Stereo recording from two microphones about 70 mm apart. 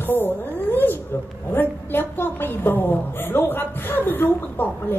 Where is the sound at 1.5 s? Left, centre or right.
Left.